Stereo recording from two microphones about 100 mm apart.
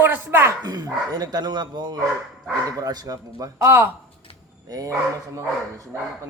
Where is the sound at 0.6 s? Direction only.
40° right (ahead or behind).